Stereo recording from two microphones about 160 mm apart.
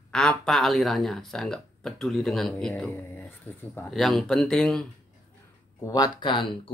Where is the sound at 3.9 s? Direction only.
Centre (ahead or behind).